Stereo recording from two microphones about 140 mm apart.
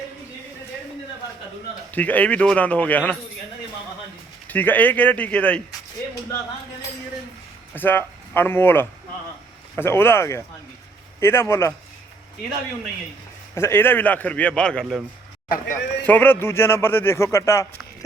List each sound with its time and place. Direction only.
1.9 s speech: 10° left (ahead or behind)
4.4 s speech: 10° left (ahead or behind)
7.7 s speech: 15° left (ahead or behind)
13.6 s speech: 15° left (ahead or behind); by 15.0 s centre (ahead or behind)
15.4 s speech: 80° left
16.0 s speech: 15° left (ahead or behind)